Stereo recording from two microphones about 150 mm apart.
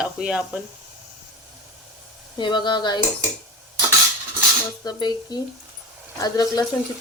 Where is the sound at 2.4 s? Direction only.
30° left (ahead or behind).